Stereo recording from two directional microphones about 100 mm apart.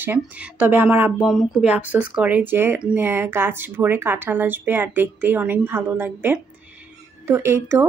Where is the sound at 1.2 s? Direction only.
Centre (ahead or behind).